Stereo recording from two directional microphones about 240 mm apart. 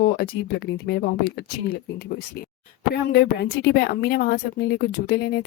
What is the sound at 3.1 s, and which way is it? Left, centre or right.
Speech, left.